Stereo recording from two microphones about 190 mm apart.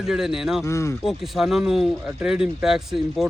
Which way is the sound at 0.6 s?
15° left (ahead or behind).